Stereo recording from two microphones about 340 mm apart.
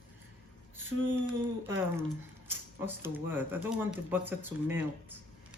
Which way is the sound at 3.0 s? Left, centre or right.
Centre.